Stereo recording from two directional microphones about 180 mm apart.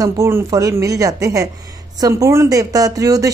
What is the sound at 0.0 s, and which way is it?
Speech, 20° right (ahead or behind).